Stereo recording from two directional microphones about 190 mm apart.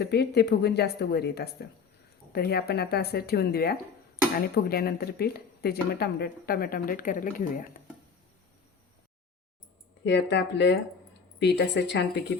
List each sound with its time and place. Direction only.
0.0 s speech: 60° left (ahead or behind)
10.0 s speech: 70° left (ahead or behind)